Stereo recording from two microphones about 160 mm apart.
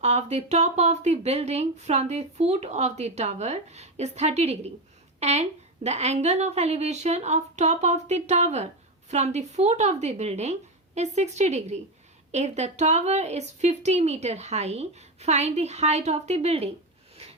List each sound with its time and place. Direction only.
0.0 s a woman's voice: 45° right (ahead or behind)